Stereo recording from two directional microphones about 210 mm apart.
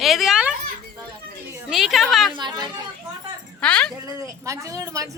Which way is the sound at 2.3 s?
20° right (ahead or behind).